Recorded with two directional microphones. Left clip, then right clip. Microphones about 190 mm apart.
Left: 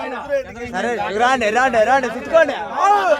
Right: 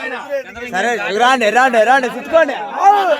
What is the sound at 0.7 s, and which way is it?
A man's voice, 50° right (ahead or behind).